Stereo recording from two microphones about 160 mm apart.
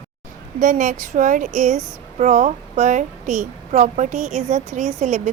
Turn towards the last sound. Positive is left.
turn(degrees=-45)  # may be behind; listen again after turning